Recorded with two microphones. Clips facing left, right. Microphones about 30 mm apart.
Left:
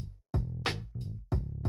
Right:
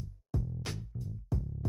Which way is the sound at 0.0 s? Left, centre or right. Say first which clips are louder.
Left 1 dB; left.